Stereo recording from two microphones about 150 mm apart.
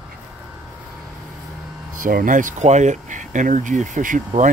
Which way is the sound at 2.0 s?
70° right (ahead or behind).